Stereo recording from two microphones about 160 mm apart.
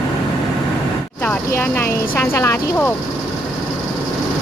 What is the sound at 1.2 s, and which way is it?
Speech, 10° left (ahead or behind).